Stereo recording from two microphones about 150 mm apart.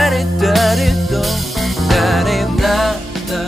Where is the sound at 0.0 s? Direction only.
Centre (ahead or behind).